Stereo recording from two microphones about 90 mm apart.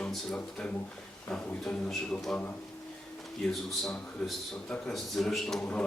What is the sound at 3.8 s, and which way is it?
A man's voice, 5° left (ahead or behind).